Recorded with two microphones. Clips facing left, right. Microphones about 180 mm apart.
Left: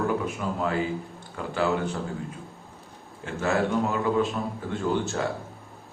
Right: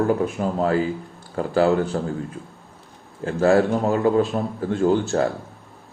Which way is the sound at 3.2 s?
35° right (ahead or behind).